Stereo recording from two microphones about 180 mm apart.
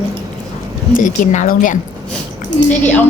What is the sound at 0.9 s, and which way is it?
Speech, 50° left (ahead or behind).